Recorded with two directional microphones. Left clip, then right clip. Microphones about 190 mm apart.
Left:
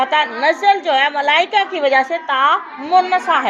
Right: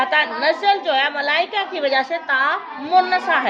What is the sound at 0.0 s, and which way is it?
A woman's voice, 20° left (ahead or behind).